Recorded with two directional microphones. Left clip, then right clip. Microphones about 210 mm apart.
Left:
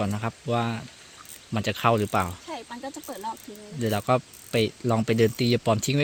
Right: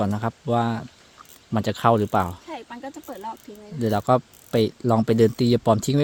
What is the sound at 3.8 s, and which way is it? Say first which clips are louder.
Speech: right 4 dB; 30° right (ahead or behind).